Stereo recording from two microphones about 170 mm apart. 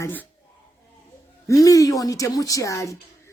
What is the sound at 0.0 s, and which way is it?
Speech, 10° left (ahead or behind).